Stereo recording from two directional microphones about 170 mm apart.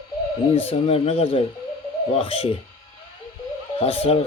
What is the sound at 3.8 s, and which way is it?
Speech, 35° left (ahead or behind).